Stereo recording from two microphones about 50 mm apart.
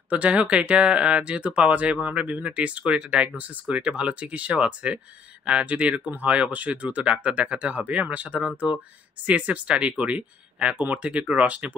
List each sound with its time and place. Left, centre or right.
0.1 s speech: right